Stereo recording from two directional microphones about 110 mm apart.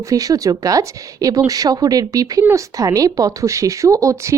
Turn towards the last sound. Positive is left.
turn(degrees=-30)  # may be behind; listen again after turning